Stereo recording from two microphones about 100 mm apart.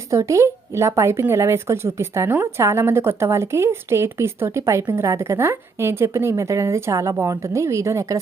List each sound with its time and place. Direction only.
0.1 s a woman's voice: 30° right (ahead or behind)